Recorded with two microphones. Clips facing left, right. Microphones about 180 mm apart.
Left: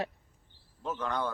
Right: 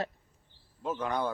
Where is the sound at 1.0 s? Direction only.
10° right (ahead or behind).